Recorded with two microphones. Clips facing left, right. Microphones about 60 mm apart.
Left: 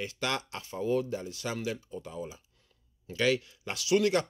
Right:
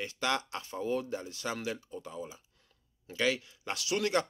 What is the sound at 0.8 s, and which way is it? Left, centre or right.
Speech, right.